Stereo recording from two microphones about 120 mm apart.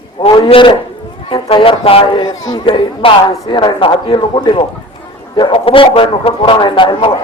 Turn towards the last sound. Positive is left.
turn(degrees=40)  # may be behind; listen again after turning